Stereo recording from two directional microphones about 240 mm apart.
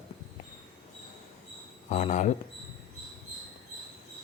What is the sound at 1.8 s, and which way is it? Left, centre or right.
Speech, left.